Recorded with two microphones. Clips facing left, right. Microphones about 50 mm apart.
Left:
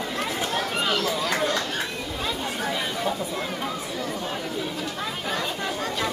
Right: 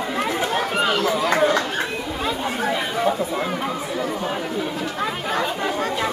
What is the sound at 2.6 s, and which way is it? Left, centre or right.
Chatter, centre.